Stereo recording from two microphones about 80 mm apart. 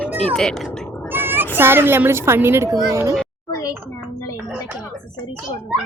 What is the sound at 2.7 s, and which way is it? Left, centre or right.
Speech, right.